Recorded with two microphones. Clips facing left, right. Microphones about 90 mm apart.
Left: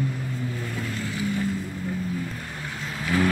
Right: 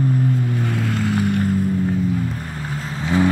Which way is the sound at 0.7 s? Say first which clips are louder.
Right 10 dB; 70° right (ahead or behind).